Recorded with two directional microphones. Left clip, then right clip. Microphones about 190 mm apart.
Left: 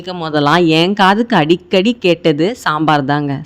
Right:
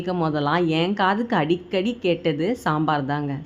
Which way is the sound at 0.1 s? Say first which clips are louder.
Left 9 dB; 35° left (ahead or behind).